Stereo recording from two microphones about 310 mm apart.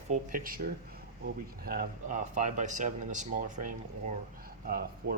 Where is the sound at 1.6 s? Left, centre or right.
Right.